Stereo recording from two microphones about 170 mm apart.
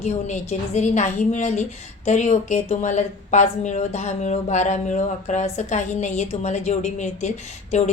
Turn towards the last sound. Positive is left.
turn(degrees=45)  # may be behind; listen again after turning